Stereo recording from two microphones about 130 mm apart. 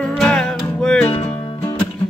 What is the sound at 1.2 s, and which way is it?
Music, 15° left (ahead or behind).